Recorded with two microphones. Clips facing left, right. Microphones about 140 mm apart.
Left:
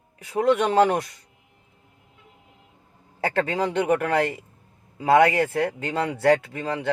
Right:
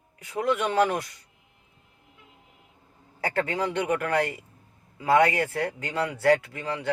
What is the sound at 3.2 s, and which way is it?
Speech, 30° left (ahead or behind).